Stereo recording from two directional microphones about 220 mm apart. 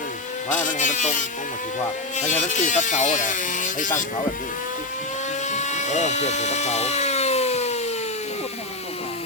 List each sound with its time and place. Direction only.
0.5 s speech: 35° left (ahead or behind)
5.5 s helicopter: 30° left (ahead or behind)